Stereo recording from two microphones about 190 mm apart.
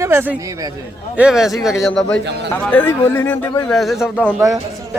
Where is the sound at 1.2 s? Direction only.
5° right (ahead or behind).